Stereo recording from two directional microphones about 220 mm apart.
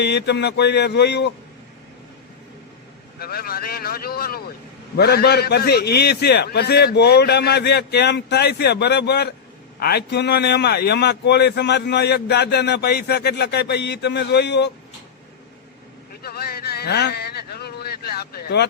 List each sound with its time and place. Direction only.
0.0 s a man's voice: 50° left (ahead or behind)
3.2 s a man's voice: 45° left (ahead or behind)
16.2 s a sound: 45° left (ahead or behind)